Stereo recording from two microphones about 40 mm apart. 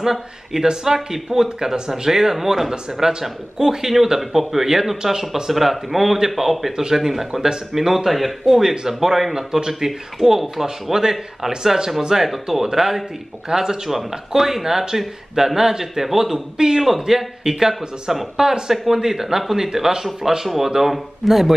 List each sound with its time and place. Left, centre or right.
0.0 s a man's voice: centre
2.7 s a man's voice: centre
16.5 s a man's voice: centre
16.8 s a man's voice: centre